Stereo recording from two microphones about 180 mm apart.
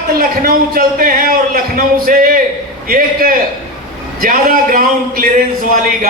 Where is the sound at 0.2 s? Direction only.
55° right (ahead or behind).